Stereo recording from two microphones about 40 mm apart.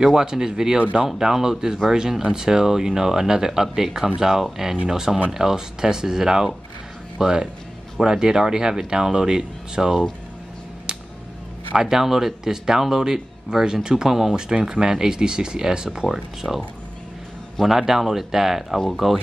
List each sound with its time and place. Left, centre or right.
0.0 s speech: centre
11.7 s speech: centre